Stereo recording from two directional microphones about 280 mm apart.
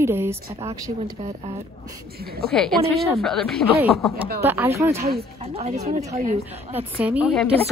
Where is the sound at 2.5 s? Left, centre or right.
Centre.